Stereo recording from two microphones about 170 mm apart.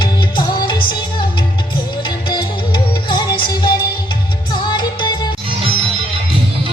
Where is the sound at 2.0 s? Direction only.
25° left (ahead or behind).